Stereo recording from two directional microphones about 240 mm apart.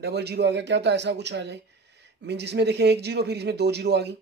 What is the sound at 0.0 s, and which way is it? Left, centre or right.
Speech, right.